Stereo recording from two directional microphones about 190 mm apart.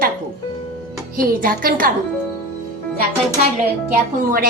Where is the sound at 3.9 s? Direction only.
50° right (ahead or behind).